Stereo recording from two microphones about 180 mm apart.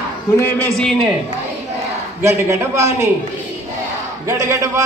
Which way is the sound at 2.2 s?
15° right (ahead or behind).